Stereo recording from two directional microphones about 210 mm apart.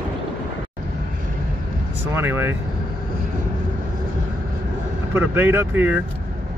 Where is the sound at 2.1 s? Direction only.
10° right (ahead or behind).